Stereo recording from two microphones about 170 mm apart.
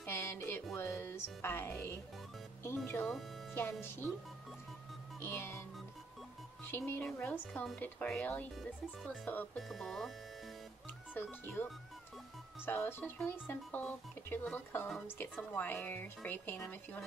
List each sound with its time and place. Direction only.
0.0 s music: 15° left (ahead or behind)
0.7 s speech: 15° left (ahead or behind)
5.2 s speech: 15° left (ahead or behind)
6.6 s speech: 10° left (ahead or behind)
9.3 s speech: 10° left (ahead or behind)
11.1 s speech: 10° left (ahead or behind)